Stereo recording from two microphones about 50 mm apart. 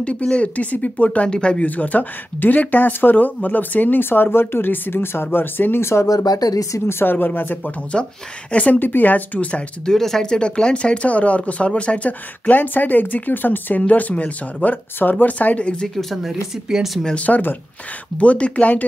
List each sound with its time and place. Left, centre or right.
0.0 s speech: left
1.3 s speech: centre
1.6 s speech: left
6.9 s speech: left
7.9 s speech: left
8.7 s speech: left
9.8 s speech: centre; by 14.8 s left
15.0 s speech: left
16.0 s speech: centre
16.6 s speech: centre
17.0 s speech: left
17.3 s speech: left
18.1 s speech: left